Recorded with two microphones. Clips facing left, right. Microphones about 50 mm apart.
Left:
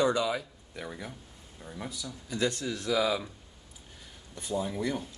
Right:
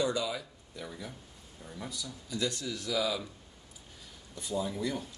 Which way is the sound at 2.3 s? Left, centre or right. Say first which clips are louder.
Left 4 dB; left.